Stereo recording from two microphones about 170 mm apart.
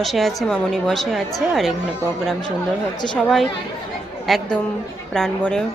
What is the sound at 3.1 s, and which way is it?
A woman's voice, centre (ahead or behind).